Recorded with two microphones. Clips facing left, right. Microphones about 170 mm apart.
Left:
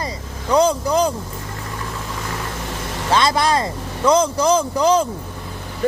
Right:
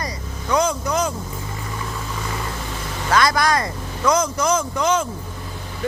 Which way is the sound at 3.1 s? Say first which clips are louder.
Left 1 dB; 25° left (ahead or behind).